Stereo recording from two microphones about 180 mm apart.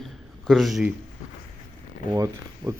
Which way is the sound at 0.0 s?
Centre (ahead or behind).